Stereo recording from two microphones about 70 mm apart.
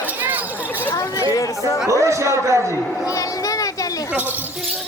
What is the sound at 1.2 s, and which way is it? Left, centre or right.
Speech, left.